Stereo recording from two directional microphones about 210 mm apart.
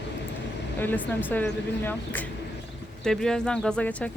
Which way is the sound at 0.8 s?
10° left (ahead or behind).